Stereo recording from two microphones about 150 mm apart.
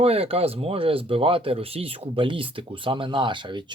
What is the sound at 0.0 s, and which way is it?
Speech, 40° right (ahead or behind).